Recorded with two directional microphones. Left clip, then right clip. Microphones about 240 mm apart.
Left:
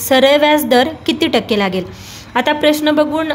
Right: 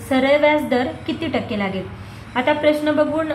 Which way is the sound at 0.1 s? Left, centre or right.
Left.